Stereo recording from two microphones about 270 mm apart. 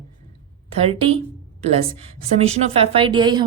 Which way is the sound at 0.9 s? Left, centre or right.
Right.